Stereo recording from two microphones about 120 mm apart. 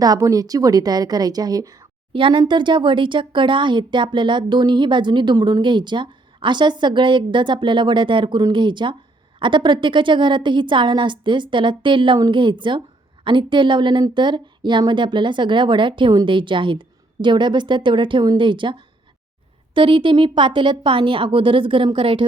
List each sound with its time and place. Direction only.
0.0 s speech: 30° right (ahead or behind)
2.1 s a woman's voice: 45° right (ahead or behind)